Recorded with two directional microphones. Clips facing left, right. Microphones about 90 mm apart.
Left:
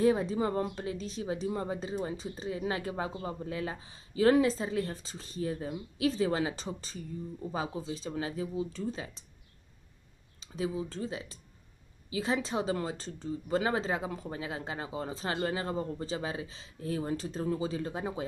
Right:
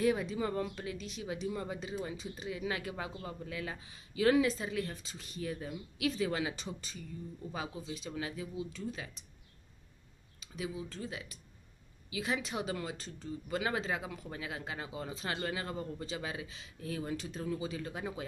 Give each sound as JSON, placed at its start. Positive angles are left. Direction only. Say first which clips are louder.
{"t": 0.0, "sound": "speech", "louder": "left 5 dB", "side_deg": 30}
{"t": 10.4, "sound": "speech", "louder": "left 6 dB", "side_deg": 30}